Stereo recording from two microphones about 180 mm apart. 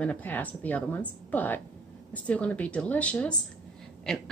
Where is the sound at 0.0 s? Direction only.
10° left (ahead or behind).